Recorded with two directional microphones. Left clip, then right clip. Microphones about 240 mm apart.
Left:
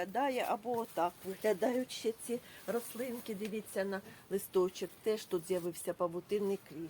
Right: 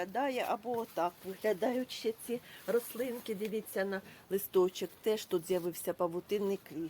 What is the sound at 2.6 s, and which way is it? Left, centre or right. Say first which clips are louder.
Speech: right 8 dB; right.